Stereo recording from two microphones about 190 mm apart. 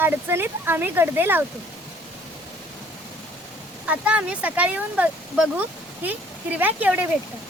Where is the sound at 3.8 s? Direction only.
10° right (ahead or behind).